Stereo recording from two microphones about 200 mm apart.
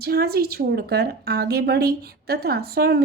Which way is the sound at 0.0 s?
50° right (ahead or behind).